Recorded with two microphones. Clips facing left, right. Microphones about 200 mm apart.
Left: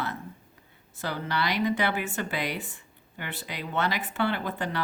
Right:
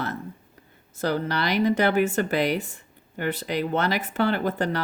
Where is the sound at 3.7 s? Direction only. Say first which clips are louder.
Even; 40° right (ahead or behind).